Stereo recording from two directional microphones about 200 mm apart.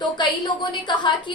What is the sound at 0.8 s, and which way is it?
Speech, 20° left (ahead or behind).